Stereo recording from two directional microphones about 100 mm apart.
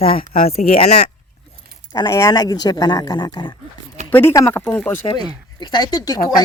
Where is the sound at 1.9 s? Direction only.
35° left (ahead or behind).